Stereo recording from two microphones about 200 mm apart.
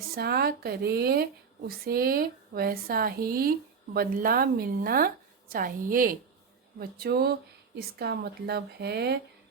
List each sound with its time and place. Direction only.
0.2 s a woman's voice: 50° right (ahead or behind)